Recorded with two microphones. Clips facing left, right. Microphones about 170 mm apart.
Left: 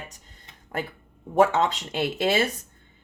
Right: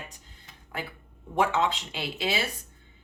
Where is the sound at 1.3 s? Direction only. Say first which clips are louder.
Left 5 dB; 45° left (ahead or behind).